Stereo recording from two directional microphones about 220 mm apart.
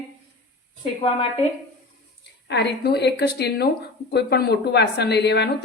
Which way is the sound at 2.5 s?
50° left (ahead or behind).